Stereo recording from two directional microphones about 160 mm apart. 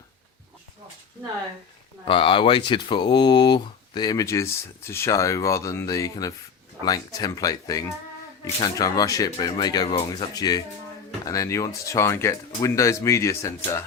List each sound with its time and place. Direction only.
2.0 s speech: 35° left (ahead or behind)